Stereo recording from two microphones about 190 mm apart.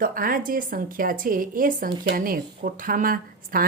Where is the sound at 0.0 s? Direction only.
50° right (ahead or behind).